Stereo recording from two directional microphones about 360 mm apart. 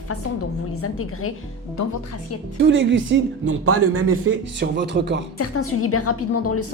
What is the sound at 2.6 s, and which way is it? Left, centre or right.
Speech, right.